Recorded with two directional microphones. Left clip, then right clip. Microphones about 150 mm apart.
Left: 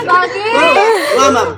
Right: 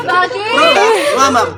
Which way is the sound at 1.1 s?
45° right (ahead or behind).